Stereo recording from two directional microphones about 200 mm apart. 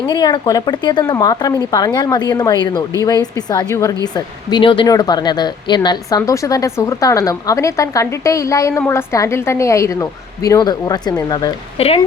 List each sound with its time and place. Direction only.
0.1 s a woman's voice: 20° left (ahead or behind)